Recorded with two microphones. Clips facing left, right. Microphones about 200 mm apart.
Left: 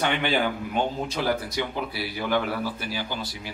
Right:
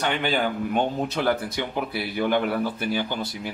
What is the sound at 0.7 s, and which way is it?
Speech, 55° right (ahead or behind).